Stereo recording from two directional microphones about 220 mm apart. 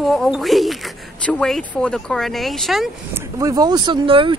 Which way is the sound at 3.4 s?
15° right (ahead or behind).